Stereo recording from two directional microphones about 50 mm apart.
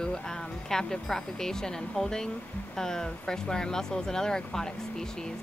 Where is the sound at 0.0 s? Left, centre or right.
Centre.